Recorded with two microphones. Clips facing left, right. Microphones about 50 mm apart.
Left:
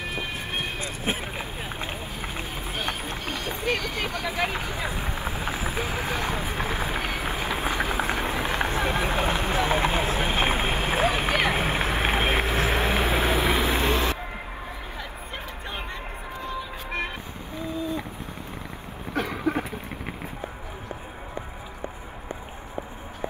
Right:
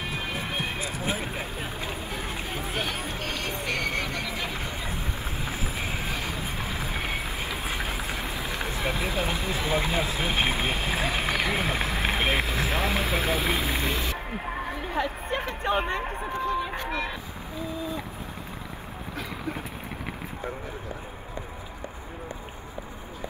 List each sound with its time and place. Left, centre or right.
0.1 s vehicle: left
3.2 s vehicle: right
4.2 s vehicle: left
10.3 s run: left
15.0 s a sound: right
19.1 s vehicle: left